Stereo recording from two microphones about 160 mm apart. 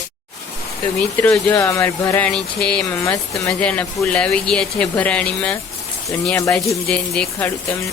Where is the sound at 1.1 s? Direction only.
10° left (ahead or behind).